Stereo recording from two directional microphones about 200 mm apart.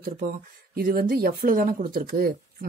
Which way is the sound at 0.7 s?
45° right (ahead or behind).